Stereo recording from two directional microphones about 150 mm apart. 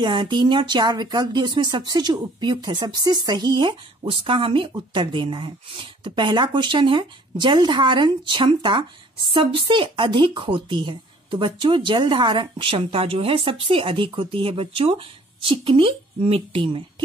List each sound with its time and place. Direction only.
0.0 s speech: 30° right (ahead or behind)